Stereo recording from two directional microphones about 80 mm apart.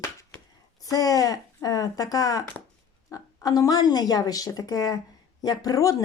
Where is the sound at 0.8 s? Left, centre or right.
Left.